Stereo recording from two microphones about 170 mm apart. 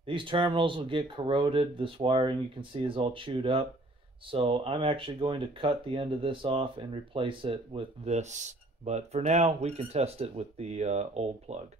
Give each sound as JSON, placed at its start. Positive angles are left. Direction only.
{"t": 0.0, "sound": "speech", "side_deg": -30}